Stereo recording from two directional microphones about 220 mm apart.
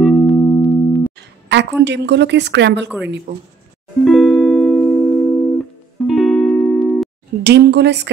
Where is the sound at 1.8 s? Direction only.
50° right (ahead or behind).